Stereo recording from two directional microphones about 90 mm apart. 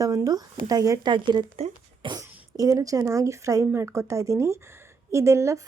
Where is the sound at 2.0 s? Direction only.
65° right (ahead or behind).